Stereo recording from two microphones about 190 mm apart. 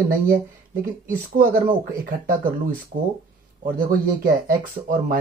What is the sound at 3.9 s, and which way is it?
Speech, 50° right (ahead or behind).